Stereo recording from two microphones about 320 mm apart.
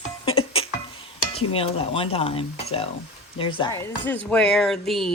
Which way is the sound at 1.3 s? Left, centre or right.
Centre.